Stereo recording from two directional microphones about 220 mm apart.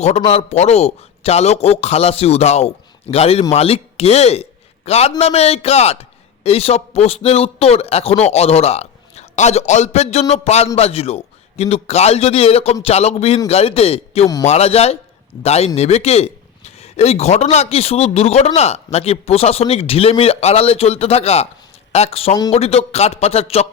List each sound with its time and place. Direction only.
0.3 s a man's voice: 30° left (ahead or behind)